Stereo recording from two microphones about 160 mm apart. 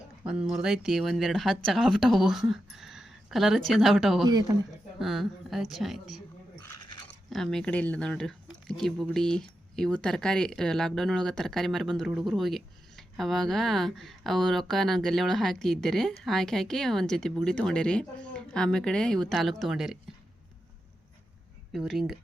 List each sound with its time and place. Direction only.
0.3 s speech: 5° right (ahead or behind)
4.2 s speech: 25° right (ahead or behind)
4.9 s speech: centre (ahead or behind)
7.3 s speech: 5° left (ahead or behind)
21.7 s speech: centre (ahead or behind)